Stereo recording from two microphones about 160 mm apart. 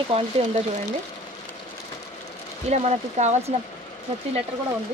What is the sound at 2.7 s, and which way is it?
Speech, 45° right (ahead or behind).